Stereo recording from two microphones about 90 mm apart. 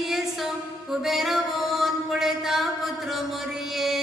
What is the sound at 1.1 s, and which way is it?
Music, centre (ahead or behind).